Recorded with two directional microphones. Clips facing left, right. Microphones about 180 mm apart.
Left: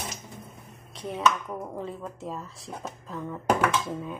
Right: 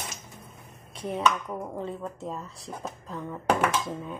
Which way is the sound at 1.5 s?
Centre (ahead or behind).